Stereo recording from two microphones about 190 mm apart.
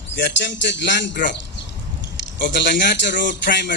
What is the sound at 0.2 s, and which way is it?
Speech, 70° left (ahead or behind).